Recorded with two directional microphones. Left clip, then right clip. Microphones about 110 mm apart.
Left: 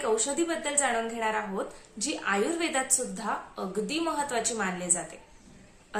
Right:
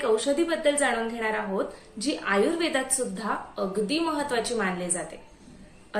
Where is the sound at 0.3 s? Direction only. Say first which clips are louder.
Right 5 dB; 35° left (ahead or behind).